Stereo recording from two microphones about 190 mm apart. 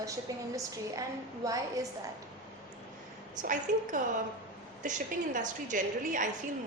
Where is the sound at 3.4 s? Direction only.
45° right (ahead or behind).